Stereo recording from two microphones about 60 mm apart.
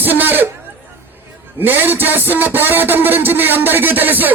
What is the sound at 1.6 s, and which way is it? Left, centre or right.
A man's voice, right.